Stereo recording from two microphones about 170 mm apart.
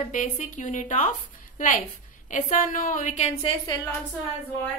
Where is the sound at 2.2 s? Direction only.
50° left (ahead or behind).